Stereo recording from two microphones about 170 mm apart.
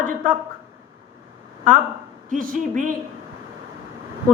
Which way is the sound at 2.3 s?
50° right (ahead or behind).